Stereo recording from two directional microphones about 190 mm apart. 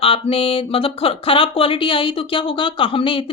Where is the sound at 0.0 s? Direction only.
30° left (ahead or behind).